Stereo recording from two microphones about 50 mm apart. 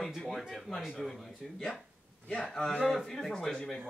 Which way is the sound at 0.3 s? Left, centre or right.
Centre.